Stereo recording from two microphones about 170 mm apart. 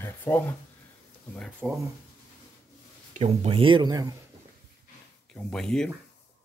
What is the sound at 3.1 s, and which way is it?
Speech, 40° right (ahead or behind).